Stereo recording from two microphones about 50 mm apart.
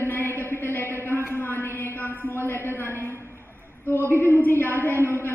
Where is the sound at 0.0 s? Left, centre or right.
Left.